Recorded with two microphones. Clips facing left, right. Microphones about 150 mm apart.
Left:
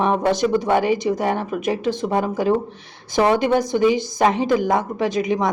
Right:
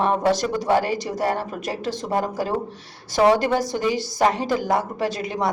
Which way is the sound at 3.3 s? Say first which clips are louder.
Left 4 dB; 20° left (ahead or behind).